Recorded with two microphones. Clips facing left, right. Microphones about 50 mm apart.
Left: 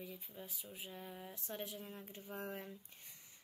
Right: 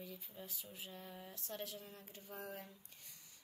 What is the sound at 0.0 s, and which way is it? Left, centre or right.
Speech, centre.